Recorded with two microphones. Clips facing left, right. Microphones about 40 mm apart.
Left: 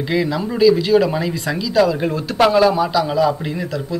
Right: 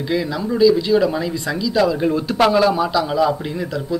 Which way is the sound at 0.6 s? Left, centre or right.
Centre.